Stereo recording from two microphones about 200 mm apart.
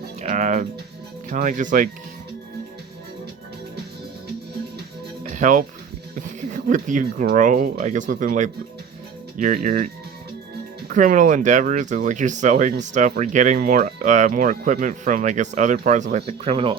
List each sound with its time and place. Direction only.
0.2 s speech: 35° right (ahead or behind)
5.3 s speech: 40° right (ahead or behind)
10.9 s speech: 40° right (ahead or behind)